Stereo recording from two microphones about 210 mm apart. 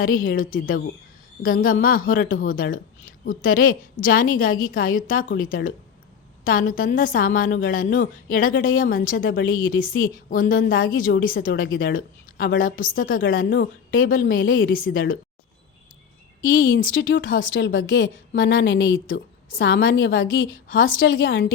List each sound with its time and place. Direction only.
0.0 s a woman's voice: 40° left (ahead or behind)
16.4 s a woman's voice: 40° left (ahead or behind)
16.9 s a woman's voice: 65° left (ahead or behind)